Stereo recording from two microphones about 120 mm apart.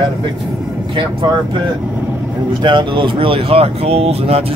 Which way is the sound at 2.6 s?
45° right (ahead or behind).